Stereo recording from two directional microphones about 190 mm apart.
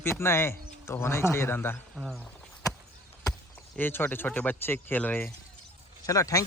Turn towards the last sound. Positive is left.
turn(degrees=15)  # may be behind; listen again after turning